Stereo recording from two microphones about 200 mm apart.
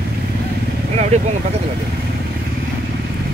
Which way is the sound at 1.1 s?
35° right (ahead or behind).